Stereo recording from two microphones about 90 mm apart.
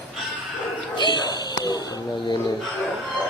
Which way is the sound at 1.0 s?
55° left (ahead or behind).